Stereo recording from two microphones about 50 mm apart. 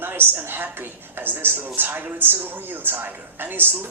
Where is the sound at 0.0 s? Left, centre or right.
Right.